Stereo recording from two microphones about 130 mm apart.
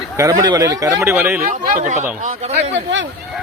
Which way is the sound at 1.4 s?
80° right.